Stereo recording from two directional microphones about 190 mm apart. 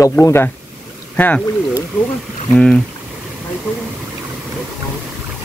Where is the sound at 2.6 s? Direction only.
5° left (ahead or behind).